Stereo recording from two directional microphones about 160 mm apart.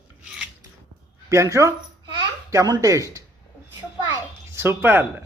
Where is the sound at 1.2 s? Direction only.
20° right (ahead or behind).